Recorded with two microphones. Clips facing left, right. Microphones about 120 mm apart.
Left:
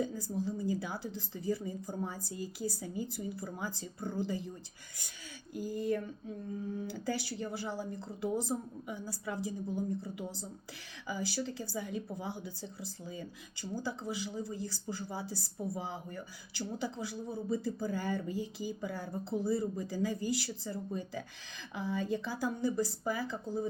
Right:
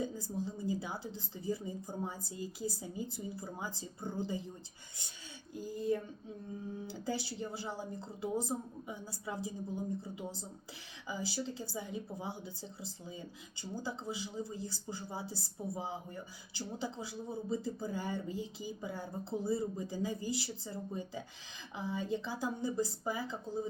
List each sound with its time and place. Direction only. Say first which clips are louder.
0.0 s a woman's voice: left 3 dB; 25° right (ahead or behind)
5.5 s a woman's voice: left 1 dB; 20° right (ahead or behind)